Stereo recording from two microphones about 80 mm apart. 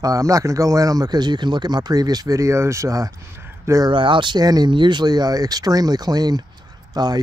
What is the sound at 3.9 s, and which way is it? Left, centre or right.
A man's voice, right.